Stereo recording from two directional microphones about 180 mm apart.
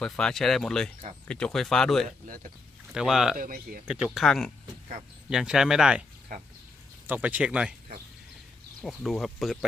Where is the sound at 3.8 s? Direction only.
5° right (ahead or behind).